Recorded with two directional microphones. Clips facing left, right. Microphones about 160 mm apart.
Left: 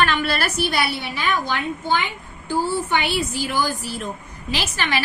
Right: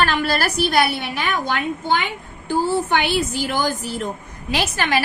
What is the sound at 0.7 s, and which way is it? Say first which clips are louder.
Speech: right 5 dB; 50° right (ahead or behind).